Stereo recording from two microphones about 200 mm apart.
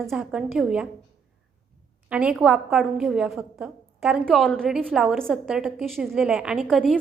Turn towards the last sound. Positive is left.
turn(degrees=0)  # may be behind; listen again after turning